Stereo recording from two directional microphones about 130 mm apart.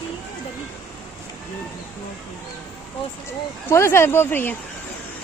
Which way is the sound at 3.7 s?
20° left (ahead or behind).